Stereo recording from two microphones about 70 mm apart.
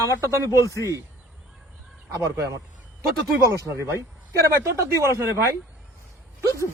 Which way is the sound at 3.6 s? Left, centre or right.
Right.